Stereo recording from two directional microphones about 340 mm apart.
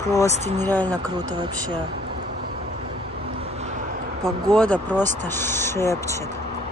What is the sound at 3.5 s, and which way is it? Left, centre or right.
Vehicle, centre.